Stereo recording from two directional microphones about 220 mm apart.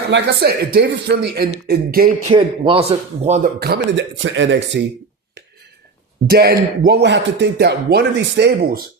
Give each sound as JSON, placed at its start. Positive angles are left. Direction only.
{"t": 0.1, "sound": "speech", "side_deg": -50}
{"t": 2.3, "sound": "speech", "side_deg": -25}
{"t": 3.6, "sound": "speech", "side_deg": -50}
{"t": 6.2, "sound": "speech", "side_deg": -45}